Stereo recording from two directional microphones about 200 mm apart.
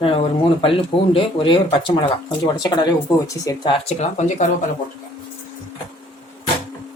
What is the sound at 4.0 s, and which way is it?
Speech, 35° left (ahead or behind).